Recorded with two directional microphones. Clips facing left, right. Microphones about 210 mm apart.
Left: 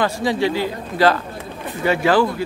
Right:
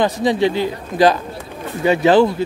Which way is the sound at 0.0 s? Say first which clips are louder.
Right 3 dB; 20° right (ahead or behind).